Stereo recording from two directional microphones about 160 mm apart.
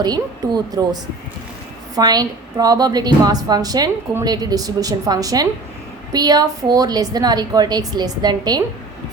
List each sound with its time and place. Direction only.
0.0 s a woman's voice: 25° right (ahead or behind)
2.0 s a woman's voice: 25° right (ahead or behind)